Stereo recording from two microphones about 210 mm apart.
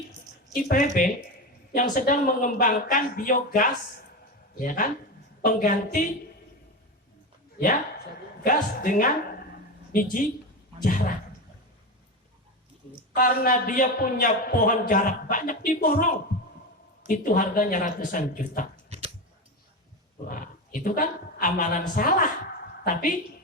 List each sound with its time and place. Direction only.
0.5 s a man's voice: 40° left (ahead or behind)
7.6 s a woman's voice: 40° left (ahead or behind)
13.0 s a man's voice: 40° left (ahead or behind)
20.2 s a woman's voice: 40° left (ahead or behind)